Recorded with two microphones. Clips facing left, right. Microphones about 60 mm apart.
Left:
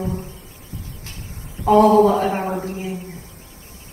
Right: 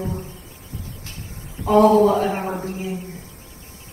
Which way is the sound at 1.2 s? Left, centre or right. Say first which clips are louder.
Left 6 dB; left.